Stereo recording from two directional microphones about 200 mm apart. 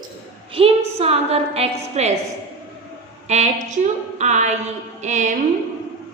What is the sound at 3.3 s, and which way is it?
Speech, 35° right (ahead or behind).